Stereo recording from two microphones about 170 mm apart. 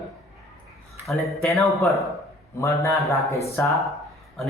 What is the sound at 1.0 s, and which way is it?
Speech, centre (ahead or behind).